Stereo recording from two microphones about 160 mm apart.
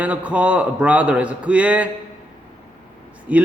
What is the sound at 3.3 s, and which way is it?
Speech, 10° right (ahead or behind).